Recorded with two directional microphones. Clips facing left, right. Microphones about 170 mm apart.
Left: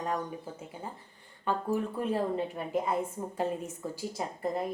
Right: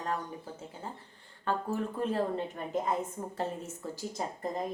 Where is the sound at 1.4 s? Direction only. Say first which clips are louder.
Left 2 dB; 15° left (ahead or behind).